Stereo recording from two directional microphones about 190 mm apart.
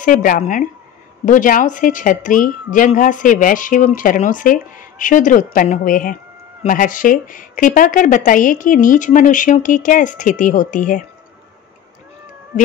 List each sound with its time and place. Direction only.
0.0 s a woman's voice: 45° left (ahead or behind)